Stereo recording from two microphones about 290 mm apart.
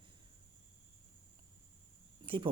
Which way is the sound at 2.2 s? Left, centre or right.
Centre.